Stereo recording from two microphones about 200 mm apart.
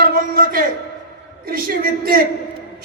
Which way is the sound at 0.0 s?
50° right (ahead or behind).